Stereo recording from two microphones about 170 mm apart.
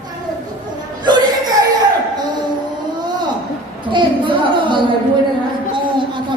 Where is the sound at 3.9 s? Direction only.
30° right (ahead or behind).